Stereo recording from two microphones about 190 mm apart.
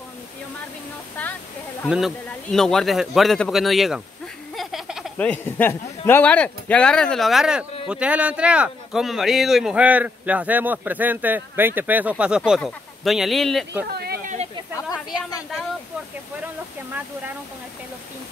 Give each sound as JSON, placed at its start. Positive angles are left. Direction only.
{"t": 1.9, "sound": "speech", "side_deg": 0}
{"t": 13.8, "sound": "a sound", "side_deg": -55}
{"t": 14.8, "sound": "a woman's voice", "side_deg": 20}